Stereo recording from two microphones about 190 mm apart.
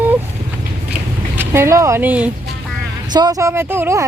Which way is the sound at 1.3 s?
15° right (ahead or behind).